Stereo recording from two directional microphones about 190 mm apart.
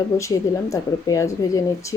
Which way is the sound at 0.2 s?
15° left (ahead or behind).